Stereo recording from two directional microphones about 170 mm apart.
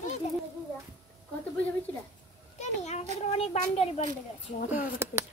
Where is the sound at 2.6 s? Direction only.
40° left (ahead or behind).